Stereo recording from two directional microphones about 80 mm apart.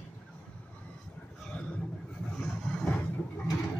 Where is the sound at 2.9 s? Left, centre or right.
Left.